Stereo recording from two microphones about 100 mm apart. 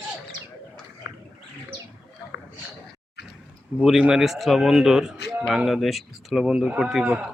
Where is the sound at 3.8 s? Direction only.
5° right (ahead or behind).